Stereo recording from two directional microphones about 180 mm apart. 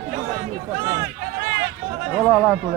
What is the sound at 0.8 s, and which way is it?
Run, 20° right (ahead or behind).